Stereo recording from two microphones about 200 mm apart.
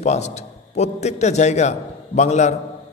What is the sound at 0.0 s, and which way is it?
A man's voice, 35° left (ahead or behind).